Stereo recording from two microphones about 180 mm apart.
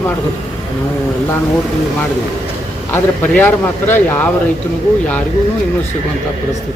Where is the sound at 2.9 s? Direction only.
10° left (ahead or behind).